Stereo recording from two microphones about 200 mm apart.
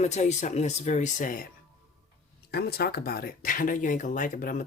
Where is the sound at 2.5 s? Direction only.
55° left (ahead or behind).